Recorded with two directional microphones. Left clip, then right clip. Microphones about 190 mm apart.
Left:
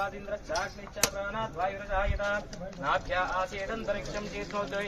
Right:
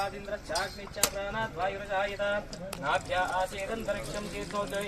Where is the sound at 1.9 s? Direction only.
15° right (ahead or behind).